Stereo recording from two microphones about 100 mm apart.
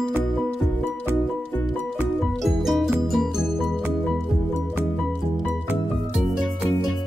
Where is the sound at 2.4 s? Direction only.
5° right (ahead or behind).